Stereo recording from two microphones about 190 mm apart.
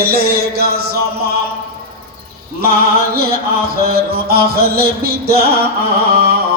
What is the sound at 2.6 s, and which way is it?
Music, 55° right (ahead or behind).